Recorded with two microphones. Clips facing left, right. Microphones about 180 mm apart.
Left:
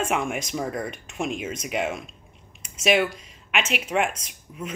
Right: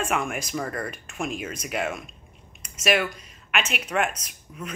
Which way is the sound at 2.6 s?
25° left (ahead or behind).